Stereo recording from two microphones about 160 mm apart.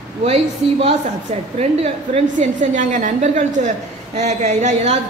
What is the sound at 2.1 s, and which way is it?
A woman's voice, 50° right (ahead or behind).